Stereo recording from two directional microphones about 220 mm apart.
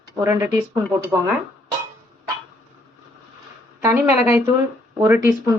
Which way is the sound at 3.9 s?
10° right (ahead or behind).